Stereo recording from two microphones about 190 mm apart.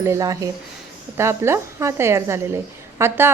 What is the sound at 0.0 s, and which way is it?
A woman's voice, 15° right (ahead or behind).